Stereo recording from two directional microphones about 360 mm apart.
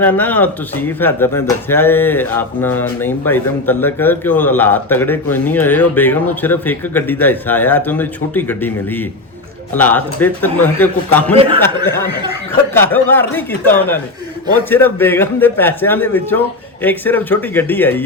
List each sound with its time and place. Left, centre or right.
0.0 s speech: centre
11.3 s speech: centre
12.7 s speech: centre